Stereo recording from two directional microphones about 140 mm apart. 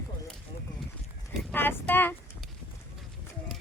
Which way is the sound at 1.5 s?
10° left (ahead or behind).